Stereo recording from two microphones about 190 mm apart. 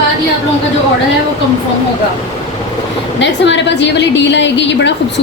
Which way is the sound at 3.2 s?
70° left (ahead or behind).